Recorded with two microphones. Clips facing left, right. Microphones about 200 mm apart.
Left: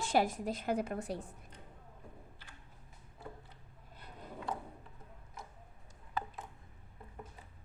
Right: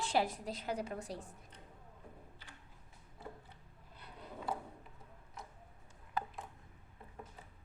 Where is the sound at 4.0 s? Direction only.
45° left (ahead or behind).